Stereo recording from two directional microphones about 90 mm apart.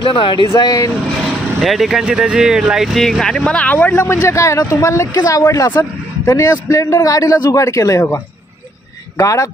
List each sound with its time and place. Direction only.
0.0 s speech: 80° left
0.6 s speech: 50° left (ahead or behind)
1.2 s a man's voice: centre (ahead or behind); by 8.2 s 35° left (ahead or behind)
9.2 s a man's voice: 35° left (ahead or behind)